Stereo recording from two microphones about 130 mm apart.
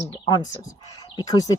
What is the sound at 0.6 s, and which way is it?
Speech, 30° left (ahead or behind).